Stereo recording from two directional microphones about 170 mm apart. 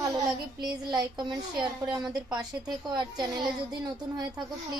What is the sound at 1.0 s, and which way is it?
Speech, 25° right (ahead or behind).